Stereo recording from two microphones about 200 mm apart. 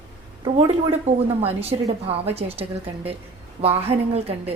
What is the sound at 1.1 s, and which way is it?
A woman's voice, 30° right (ahead or behind).